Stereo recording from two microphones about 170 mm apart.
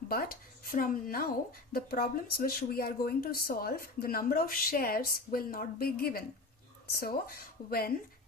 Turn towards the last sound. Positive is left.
turn(degrees=60)  # may be behind; listen again after turning